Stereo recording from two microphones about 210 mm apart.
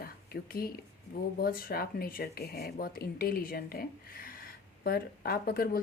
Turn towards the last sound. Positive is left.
turn(degrees=45)  # may be behind; listen again after turning